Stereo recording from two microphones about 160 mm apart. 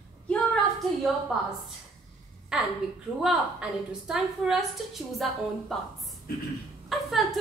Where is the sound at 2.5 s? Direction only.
5° right (ahead or behind).